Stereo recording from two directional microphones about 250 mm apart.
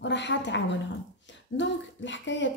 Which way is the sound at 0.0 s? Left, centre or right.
Left.